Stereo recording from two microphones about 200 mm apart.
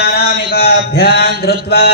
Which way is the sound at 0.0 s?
50° left (ahead or behind).